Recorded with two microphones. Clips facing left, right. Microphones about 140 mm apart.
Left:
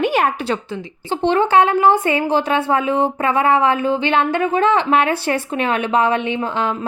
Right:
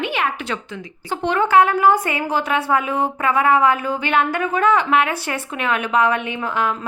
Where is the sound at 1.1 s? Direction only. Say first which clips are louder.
Left 2 dB; 30° left (ahead or behind).